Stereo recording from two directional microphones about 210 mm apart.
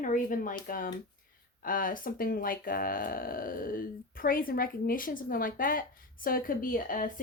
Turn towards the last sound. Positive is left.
turn(degrees=40)  # may be behind; listen again after turning